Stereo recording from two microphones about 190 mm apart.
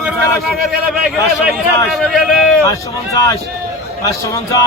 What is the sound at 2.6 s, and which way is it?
A man's voice, 15° left (ahead or behind).